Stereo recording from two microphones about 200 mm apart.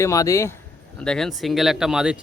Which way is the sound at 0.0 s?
15° left (ahead or behind).